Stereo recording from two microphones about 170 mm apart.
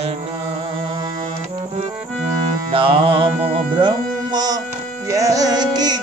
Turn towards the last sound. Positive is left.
turn(degrees=-25)  # may be behind; listen again after turning